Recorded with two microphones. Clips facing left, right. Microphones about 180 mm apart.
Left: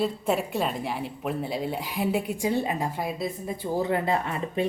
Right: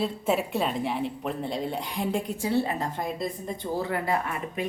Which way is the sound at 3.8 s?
20° left (ahead or behind).